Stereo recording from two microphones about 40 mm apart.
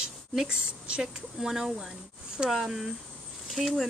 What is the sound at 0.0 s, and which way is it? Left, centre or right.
A woman's voice, centre.